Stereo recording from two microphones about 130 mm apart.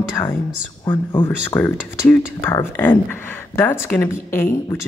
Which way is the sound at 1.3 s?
10° left (ahead or behind).